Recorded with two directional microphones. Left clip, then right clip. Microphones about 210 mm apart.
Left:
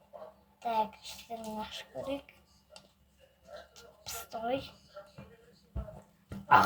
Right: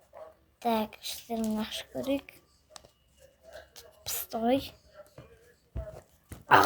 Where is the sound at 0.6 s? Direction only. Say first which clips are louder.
Right 2 dB; 45° right (ahead or behind).